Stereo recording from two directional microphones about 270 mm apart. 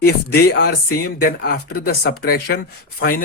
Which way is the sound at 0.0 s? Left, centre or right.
Left.